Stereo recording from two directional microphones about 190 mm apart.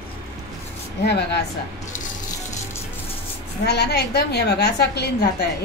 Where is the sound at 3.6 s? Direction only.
60° left (ahead or behind).